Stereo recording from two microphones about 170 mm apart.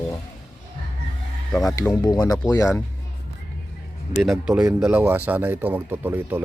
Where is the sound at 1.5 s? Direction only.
Centre (ahead or behind).